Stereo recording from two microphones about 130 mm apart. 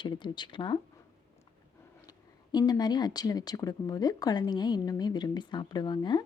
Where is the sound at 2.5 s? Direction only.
30° left (ahead or behind).